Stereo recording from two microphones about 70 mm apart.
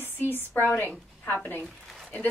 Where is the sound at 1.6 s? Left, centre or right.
Centre.